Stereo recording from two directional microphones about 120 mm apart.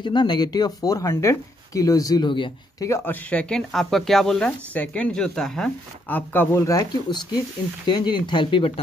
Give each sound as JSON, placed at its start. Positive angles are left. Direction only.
{"t": 0.0, "sound": "speech", "side_deg": 40}
{"t": 2.8, "sound": "speech", "side_deg": 25}
{"t": 3.3, "sound": "speech", "side_deg": 10}
{"t": 6.0, "sound": "speech", "side_deg": 15}
{"t": 6.8, "sound": "speech", "side_deg": 40}